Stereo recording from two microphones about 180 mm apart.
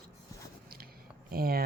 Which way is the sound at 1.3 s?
55° right (ahead or behind).